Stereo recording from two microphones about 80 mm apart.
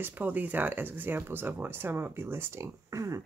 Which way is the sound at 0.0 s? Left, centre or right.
Right.